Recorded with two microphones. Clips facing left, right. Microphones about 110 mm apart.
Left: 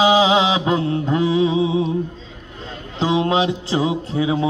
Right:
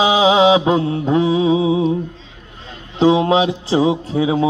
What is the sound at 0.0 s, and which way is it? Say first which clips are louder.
Mantra: right 2 dB; 25° right (ahead or behind).